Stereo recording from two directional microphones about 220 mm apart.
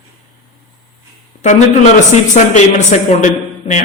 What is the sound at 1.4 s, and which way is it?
A man's voice, 30° left (ahead or behind).